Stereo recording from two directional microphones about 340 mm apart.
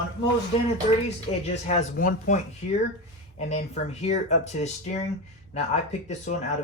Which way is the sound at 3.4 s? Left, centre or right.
Centre.